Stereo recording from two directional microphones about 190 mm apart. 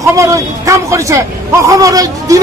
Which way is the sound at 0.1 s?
15° right (ahead or behind).